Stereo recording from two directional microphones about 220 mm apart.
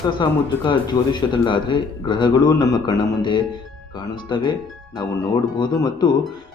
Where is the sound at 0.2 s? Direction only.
20° left (ahead or behind).